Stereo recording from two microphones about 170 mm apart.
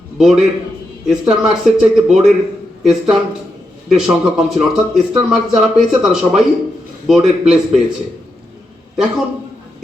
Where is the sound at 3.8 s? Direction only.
Centre (ahead or behind).